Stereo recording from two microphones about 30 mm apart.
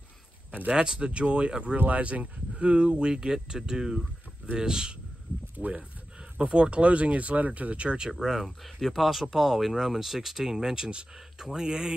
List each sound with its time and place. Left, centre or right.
0.7 s speech: right
1.9 s speech: right
3.1 s speech: right
6.5 s speech: right
7.7 s speech: right
8.2 s speech: centre
8.9 s speech: centre; by 11.9 s right